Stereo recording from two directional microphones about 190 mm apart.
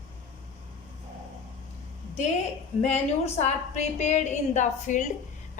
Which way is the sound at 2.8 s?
35° left (ahead or behind).